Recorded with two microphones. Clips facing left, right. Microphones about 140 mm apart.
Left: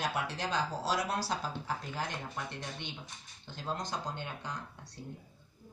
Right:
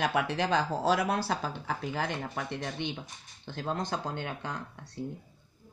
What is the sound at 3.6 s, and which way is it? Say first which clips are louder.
Speech: right 5 dB; 55° right (ahead or behind).